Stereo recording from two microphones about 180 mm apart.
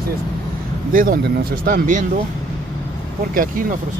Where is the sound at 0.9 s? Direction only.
50° right (ahead or behind).